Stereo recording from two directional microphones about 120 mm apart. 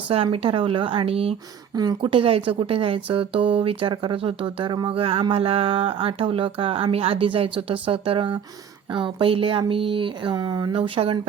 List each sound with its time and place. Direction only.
0.1 s speech: 55° right (ahead or behind)
1.7 s speech: 35° right (ahead or behind)
2.0 s speech: 50° right (ahead or behind)
10.3 s speech: 35° right (ahead or behind)
10.8 s speech: 50° right (ahead or behind)